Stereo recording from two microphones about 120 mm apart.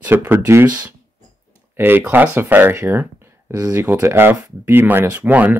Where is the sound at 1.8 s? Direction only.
15° right (ahead or behind).